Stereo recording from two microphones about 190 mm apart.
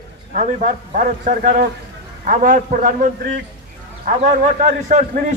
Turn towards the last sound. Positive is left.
turn(degrees=-40)  # may be behind; listen again after turning